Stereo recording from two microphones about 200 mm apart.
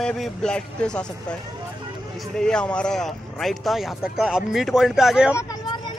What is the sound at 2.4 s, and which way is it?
Speech, 5° left (ahead or behind).